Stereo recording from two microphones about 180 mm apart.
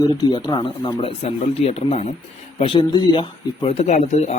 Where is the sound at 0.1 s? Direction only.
25° left (ahead or behind).